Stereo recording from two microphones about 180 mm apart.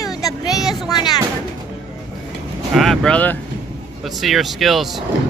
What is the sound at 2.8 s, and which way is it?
Speech, 5° left (ahead or behind).